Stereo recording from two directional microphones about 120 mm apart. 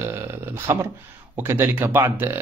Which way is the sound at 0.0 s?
20° right (ahead or behind).